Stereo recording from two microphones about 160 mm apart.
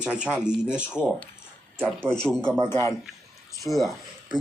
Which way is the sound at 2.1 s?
5° left (ahead or behind).